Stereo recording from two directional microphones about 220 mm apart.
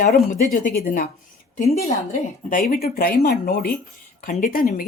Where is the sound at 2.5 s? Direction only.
40° left (ahead or behind).